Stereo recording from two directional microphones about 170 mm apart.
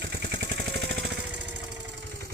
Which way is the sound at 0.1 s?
80° right.